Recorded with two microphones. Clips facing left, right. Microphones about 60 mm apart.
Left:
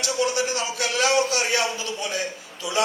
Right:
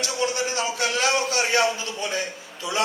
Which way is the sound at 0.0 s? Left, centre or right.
Right.